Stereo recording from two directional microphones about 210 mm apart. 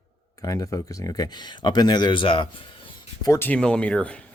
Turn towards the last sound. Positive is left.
turn(degrees=5)  # may be behind; listen again after turning